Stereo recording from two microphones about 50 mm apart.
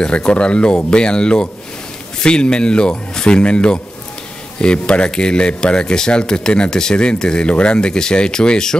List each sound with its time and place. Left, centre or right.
0.0 s speech: centre